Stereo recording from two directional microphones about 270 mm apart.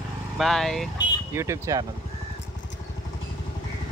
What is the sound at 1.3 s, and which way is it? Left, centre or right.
Speech, centre.